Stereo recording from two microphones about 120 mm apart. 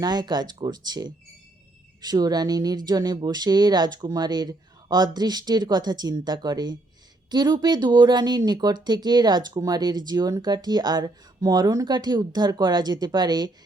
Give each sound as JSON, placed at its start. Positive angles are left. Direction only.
{"t": 0.0, "sound": "speech", "side_deg": -35}